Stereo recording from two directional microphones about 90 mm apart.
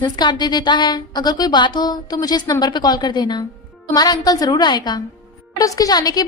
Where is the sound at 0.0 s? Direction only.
55° left (ahead or behind).